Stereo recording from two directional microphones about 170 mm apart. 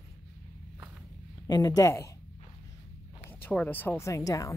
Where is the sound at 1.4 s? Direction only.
20° left (ahead or behind).